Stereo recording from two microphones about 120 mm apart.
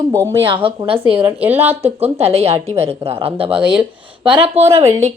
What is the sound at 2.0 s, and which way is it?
A woman's voice, 60° right (ahead or behind).